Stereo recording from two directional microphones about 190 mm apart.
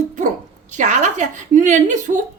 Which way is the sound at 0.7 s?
40° right (ahead or behind).